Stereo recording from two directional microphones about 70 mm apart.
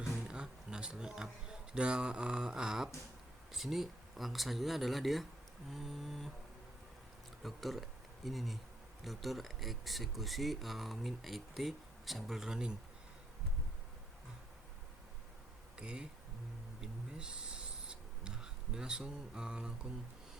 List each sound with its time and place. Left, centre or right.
0.0 s speech: centre
7.4 s speech: centre
15.8 s speech: centre
16.8 s writing: centre